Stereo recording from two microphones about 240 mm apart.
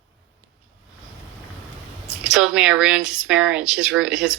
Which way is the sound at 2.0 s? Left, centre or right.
Centre.